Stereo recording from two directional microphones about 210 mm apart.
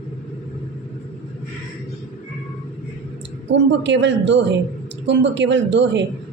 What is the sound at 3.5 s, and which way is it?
A man's voice, 60° right (ahead or behind).